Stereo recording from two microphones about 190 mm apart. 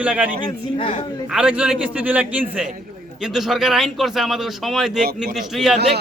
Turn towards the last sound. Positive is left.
turn(degrees=0)  # may be behind; listen again after turning